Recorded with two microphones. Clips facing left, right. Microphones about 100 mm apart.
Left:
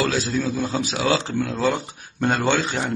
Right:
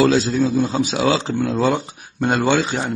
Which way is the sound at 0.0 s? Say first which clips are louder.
Right 7 dB; 20° right (ahead or behind).